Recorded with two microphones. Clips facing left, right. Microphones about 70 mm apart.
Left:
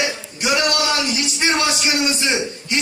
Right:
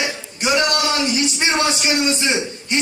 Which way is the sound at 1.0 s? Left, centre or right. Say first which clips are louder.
Right 1 dB; right.